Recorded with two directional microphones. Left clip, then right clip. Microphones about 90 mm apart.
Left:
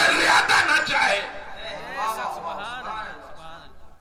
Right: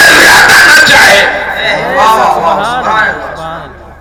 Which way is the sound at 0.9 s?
35° left (ahead or behind).